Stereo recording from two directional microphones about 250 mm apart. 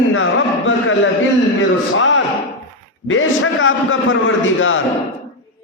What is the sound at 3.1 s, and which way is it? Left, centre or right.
A man's voice, left.